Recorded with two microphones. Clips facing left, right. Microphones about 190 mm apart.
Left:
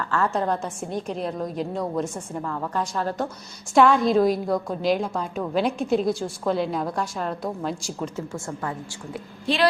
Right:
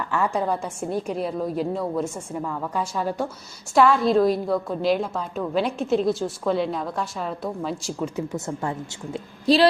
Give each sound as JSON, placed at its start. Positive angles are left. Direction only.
{"t": 0.1, "sound": "a woman's voice", "side_deg": -10}
{"t": 8.1, "sound": "speech", "side_deg": -20}